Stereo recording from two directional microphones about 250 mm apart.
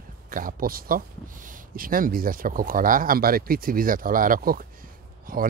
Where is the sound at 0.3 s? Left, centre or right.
Right.